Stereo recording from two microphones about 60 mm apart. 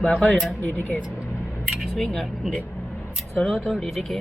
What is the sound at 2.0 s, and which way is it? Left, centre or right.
Speech, centre.